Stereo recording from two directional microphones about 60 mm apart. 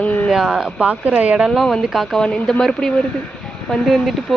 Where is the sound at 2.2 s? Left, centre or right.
Centre.